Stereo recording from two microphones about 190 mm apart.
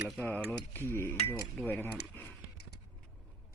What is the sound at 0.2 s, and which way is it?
Speech, 10° left (ahead or behind).